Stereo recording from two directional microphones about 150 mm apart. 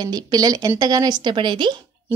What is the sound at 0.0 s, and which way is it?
A woman's voice, 25° right (ahead or behind).